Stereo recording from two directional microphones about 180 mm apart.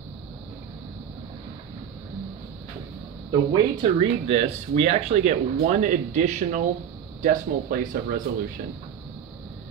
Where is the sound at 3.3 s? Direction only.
25° right (ahead or behind); by 8.2 s 50° right (ahead or behind).